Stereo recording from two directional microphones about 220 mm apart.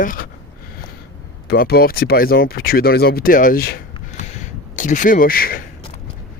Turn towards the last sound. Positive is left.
turn(degrees=40)  # may be behind; listen again after turning